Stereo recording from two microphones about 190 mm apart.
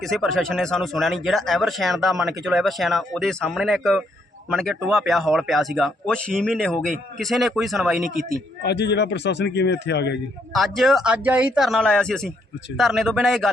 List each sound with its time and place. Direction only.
0.0 s speech: centre (ahead or behind)
8.6 s a man's voice: 60° left (ahead or behind)
10.5 s speech: centre (ahead or behind)